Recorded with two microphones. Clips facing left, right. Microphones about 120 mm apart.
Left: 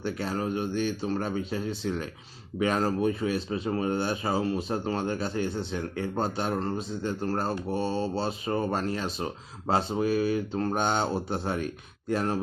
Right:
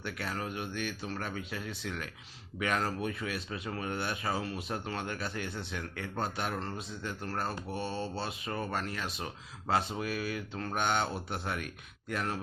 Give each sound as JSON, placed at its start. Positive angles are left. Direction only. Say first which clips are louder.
{"t": 0.0, "sound": "speech", "louder": "left 7 dB", "side_deg": 30}